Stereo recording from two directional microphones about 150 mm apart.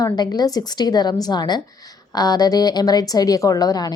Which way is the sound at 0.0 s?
25° left (ahead or behind).